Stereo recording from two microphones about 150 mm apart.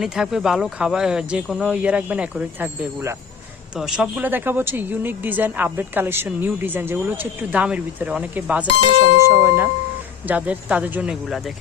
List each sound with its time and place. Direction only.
0.0 s speech: 5° right (ahead or behind)
3.8 s speech: 5° right (ahead or behind)